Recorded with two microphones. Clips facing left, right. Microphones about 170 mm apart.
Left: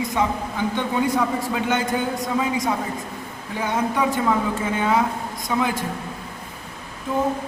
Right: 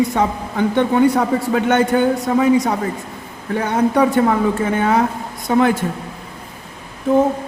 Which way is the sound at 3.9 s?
60° right (ahead or behind).